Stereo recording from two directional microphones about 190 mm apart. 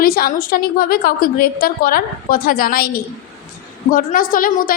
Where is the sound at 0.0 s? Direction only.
50° left (ahead or behind).